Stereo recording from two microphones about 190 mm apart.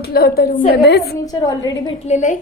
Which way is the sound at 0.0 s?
55° left (ahead or behind).